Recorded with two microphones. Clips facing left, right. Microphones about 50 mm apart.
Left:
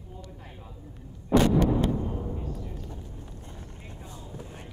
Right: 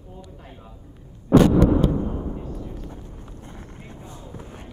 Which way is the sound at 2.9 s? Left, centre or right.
Right.